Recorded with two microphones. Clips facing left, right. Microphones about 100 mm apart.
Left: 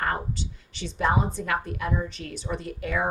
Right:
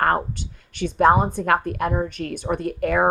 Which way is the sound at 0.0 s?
55° right (ahead or behind).